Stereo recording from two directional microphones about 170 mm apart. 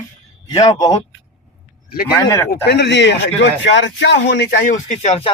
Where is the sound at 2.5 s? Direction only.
80° left.